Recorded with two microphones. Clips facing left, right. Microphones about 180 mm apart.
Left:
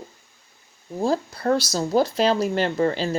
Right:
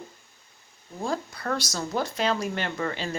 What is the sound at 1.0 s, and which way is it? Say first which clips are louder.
Speech: left 7 dB; 35° left (ahead or behind).